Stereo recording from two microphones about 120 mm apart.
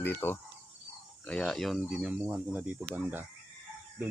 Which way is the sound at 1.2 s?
5° left (ahead or behind).